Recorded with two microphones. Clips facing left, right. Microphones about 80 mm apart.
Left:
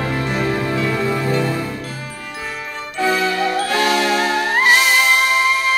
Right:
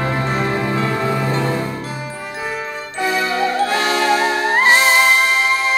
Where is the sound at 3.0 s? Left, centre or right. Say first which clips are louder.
Left 1 dB; right.